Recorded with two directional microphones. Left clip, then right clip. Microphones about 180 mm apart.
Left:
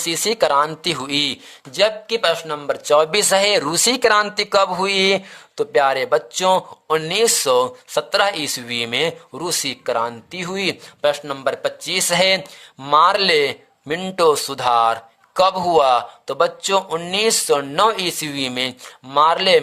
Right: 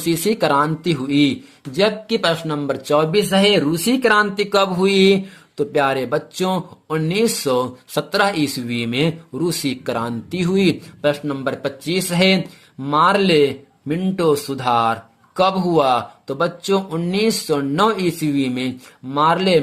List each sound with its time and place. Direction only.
0.0 s speech: 25° left (ahead or behind)
2.0 s speech: 10° left (ahead or behind)
3.1 s speech: 45° left (ahead or behind)